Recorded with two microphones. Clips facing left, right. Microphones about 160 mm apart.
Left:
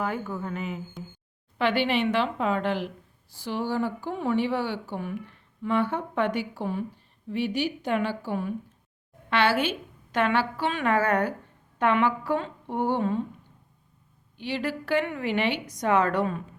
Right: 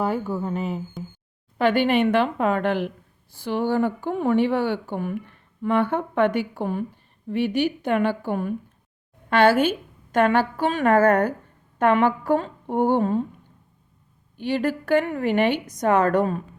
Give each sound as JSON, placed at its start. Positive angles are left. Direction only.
{"t": 0.0, "sound": "speech", "side_deg": -30}
{"t": 1.5, "sound": "a woman's voice", "side_deg": -45}
{"t": 14.3, "sound": "a woman's voice", "side_deg": -50}